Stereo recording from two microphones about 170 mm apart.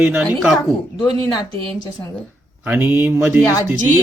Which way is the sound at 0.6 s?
20° left (ahead or behind).